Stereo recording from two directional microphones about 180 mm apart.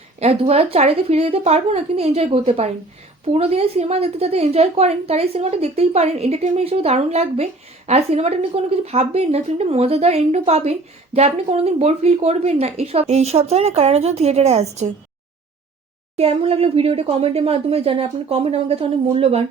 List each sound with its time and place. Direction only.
0.2 s speech: 35° right (ahead or behind)
16.1 s speech: 35° right (ahead or behind)